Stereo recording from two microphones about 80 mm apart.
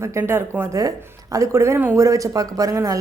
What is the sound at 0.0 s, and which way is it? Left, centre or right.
Speech, right.